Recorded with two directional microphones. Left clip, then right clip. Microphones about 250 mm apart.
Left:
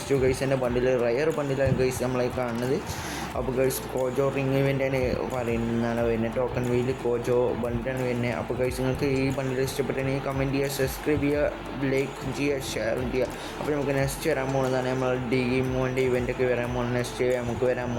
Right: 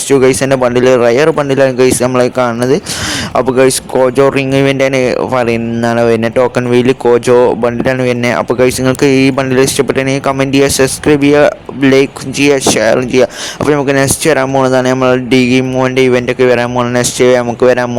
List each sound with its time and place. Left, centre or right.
0.1 s speech: left